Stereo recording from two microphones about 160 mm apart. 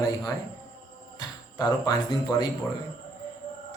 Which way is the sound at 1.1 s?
25° left (ahead or behind).